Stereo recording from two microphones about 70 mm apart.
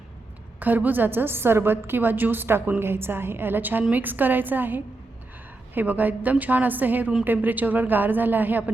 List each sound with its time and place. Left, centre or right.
0.6 s a woman's voice: right